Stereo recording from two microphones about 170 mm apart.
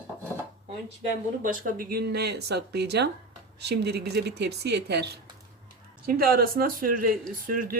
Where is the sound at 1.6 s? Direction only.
60° right (ahead or behind); by 5.1 s 75° right (ahead or behind).